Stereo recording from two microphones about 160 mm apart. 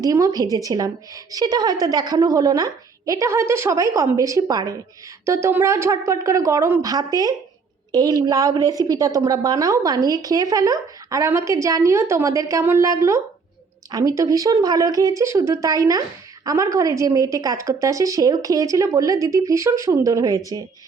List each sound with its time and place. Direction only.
0.0 s speech: 20° right (ahead or behind)